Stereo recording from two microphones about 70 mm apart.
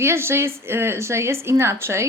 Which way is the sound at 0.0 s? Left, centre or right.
Right.